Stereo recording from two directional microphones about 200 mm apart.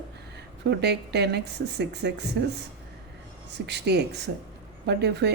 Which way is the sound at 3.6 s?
55° right (ahead or behind).